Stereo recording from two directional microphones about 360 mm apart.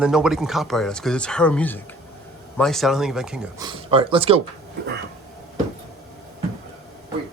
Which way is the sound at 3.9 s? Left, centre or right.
Centre.